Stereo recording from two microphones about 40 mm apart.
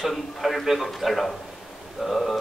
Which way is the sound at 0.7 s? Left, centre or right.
Centre.